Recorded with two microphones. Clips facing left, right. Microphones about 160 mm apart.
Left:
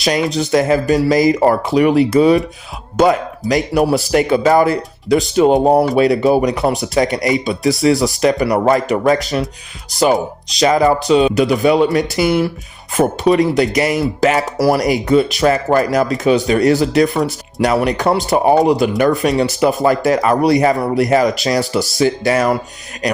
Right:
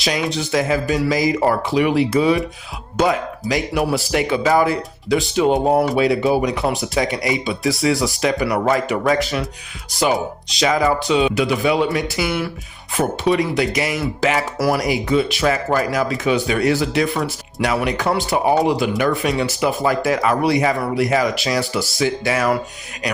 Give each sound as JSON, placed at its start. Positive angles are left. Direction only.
{"t": 0.0, "sound": "speech", "side_deg": 45}
{"t": 3.5, "sound": "speech", "side_deg": 40}
{"t": 7.4, "sound": "speech", "side_deg": 40}
{"t": 10.5, "sound": "speech", "side_deg": 40}